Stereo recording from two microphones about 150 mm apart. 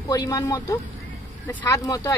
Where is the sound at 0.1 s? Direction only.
25° left (ahead or behind).